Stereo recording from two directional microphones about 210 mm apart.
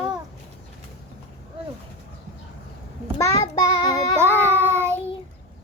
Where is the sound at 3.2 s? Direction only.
15° left (ahead or behind).